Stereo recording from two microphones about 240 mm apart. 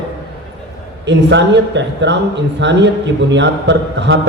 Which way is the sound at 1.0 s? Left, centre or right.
Right.